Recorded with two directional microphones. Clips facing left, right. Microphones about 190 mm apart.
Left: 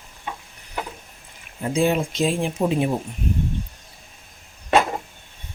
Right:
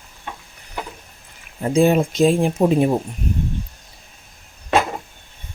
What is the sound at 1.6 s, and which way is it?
Speech, 45° right (ahead or behind).